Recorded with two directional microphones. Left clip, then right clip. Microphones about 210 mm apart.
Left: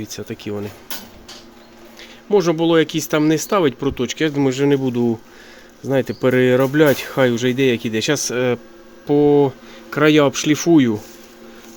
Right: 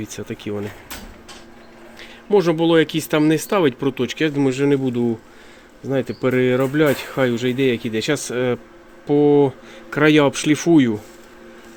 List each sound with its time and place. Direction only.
0.0 s speech: centre (ahead or behind)
2.0 s speech: centre (ahead or behind)